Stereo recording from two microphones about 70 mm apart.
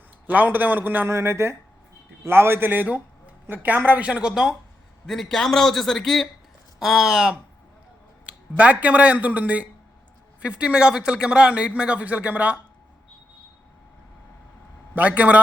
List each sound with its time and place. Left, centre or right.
0.3 s speech: right
1.0 s a man's voice: right; by 4.5 s centre
5.0 s a man's voice: centre
8.3 s speech: right
14.9 s speech: right